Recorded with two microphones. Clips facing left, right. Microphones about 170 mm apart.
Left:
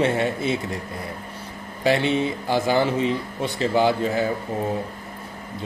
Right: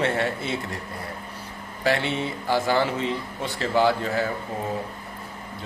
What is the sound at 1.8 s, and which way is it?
A man's voice, 20° left (ahead or behind).